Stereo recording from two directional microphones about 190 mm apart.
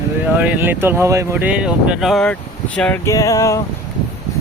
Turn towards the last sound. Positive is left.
turn(degrees=15)  # may be behind; listen again after turning